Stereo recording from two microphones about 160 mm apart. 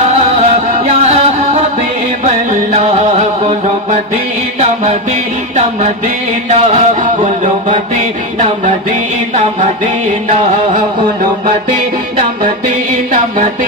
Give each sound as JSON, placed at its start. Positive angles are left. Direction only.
{"t": 0.0, "sound": "music", "side_deg": -45}
{"t": 6.5, "sound": "music", "side_deg": -45}